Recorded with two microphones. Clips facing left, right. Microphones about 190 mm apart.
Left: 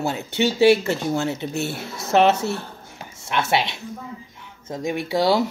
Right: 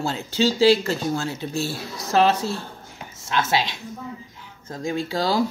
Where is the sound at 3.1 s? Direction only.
25° left (ahead or behind).